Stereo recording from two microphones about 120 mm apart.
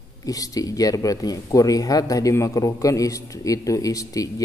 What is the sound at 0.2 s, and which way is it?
Speech, 30° left (ahead or behind).